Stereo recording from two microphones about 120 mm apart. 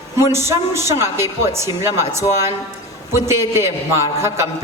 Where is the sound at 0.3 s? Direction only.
20° right (ahead or behind).